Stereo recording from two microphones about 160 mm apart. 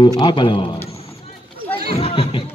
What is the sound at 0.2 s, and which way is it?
Speech, 30° left (ahead or behind).